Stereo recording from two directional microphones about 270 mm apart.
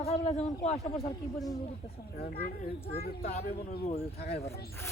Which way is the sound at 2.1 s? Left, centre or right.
Left.